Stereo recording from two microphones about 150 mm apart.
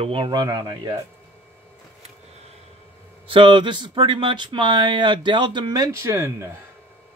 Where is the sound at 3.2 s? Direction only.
35° right (ahead or behind); by 6.5 s 20° right (ahead or behind).